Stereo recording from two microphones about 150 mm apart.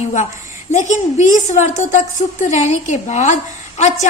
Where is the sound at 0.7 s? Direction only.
55° left (ahead or behind).